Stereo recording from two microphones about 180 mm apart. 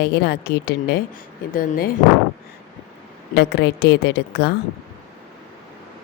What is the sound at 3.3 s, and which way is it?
Speech, 65° left (ahead or behind).